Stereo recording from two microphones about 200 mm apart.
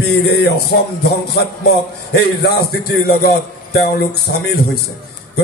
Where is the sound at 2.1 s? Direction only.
55° left (ahead or behind).